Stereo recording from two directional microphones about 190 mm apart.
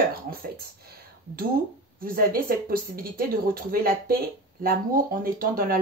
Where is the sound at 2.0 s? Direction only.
50° right (ahead or behind).